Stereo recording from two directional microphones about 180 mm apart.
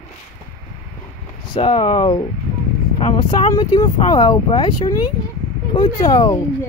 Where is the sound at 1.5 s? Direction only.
25° left (ahead or behind).